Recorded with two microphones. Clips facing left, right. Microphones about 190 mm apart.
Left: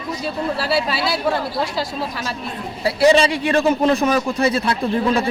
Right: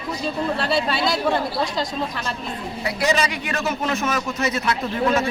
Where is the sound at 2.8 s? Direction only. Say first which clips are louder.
Left 8 dB; 30° left (ahead or behind).